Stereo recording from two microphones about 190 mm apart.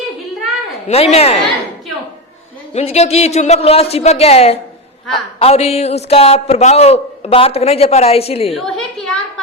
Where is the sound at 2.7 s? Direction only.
35° left (ahead or behind).